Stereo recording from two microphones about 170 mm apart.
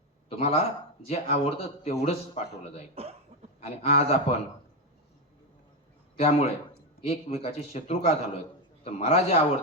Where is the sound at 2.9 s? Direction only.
35° right (ahead or behind).